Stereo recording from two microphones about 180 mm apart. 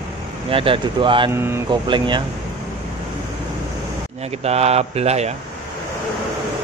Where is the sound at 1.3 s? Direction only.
15° right (ahead or behind).